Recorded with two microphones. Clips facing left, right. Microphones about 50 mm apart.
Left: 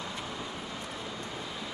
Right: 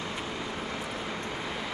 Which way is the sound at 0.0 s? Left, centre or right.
Right.